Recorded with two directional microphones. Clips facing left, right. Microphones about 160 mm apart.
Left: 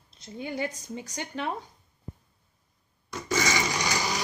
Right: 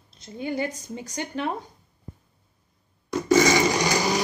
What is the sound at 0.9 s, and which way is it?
Speech, 5° right (ahead or behind).